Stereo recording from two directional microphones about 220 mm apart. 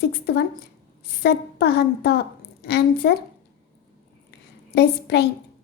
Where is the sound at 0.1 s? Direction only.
45° left (ahead or behind).